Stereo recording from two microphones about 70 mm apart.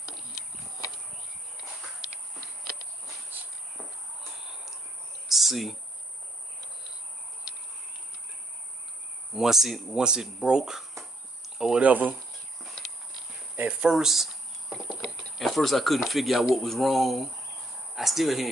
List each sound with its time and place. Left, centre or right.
5.3 s cricket: centre
9.3 s speech: centre
11.8 s speech: right
13.6 s speech: centre
13.8 s cricket: centre
17.9 s speech: centre